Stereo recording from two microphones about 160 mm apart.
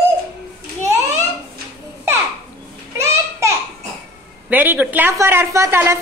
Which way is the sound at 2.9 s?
15° right (ahead or behind).